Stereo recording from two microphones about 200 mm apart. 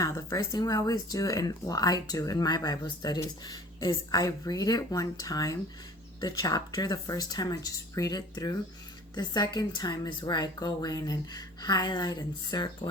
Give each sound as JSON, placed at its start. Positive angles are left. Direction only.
{"t": 0.0, "sound": "a woman's voice", "side_deg": 15}